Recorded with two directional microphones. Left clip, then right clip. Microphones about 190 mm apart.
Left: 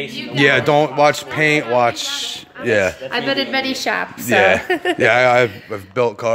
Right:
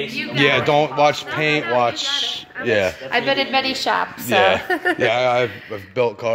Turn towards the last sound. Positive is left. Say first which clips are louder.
# left 2 dB
turn(degrees=20)  # may be behind; listen again after turning